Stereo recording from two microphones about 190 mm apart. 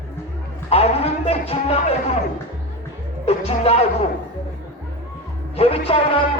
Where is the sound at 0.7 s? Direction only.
30° left (ahead or behind).